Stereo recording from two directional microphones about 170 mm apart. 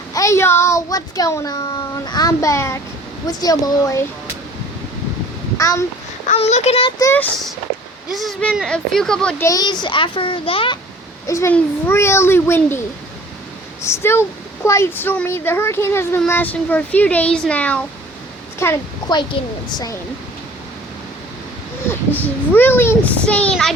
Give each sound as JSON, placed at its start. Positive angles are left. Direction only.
{"t": 0.1, "sound": "speech", "side_deg": 20}
{"t": 5.5, "sound": "a child's voice", "side_deg": 20}
{"t": 6.2, "sound": "a child's voice", "side_deg": 40}
{"t": 7.0, "sound": "speech", "side_deg": 10}
{"t": 8.1, "sound": "speech", "side_deg": 0}
{"t": 9.4, "sound": "speech", "side_deg": 20}
{"t": 11.3, "sound": "speech", "side_deg": 15}
{"t": 13.8, "sound": "speech", "side_deg": 15}
{"t": 18.6, "sound": "a woman's voice", "side_deg": 20}
{"t": 21.8, "sound": "speech", "side_deg": 10}